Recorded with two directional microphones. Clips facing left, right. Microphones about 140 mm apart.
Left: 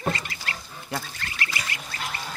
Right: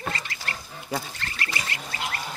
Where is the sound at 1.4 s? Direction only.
30° right (ahead or behind).